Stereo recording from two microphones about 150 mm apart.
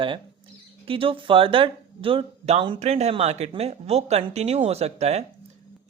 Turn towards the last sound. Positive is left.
turn(degrees=-50)  # may be behind; listen again after turning